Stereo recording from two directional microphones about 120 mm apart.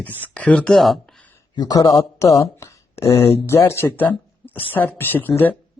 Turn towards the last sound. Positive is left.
turn(degrees=15)  # may be behind; listen again after turning